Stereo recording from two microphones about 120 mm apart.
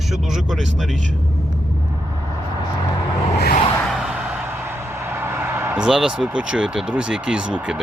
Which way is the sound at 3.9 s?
5° right (ahead or behind).